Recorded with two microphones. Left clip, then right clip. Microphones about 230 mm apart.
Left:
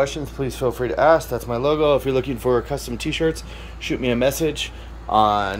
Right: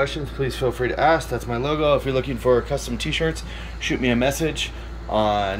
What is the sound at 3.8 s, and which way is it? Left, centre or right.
Speech, centre.